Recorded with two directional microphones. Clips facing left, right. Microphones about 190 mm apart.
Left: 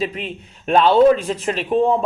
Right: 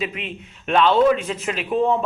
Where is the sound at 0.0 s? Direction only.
35° left (ahead or behind).